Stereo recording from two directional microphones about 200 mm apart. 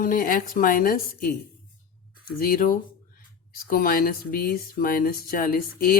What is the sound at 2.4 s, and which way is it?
Speech, 45° left (ahead or behind).